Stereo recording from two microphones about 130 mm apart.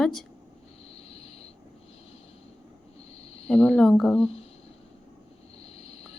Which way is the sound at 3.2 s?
50° left (ahead or behind).